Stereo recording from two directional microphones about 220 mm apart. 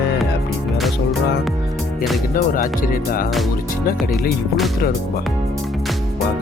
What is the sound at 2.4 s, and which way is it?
Speech, 40° left (ahead or behind).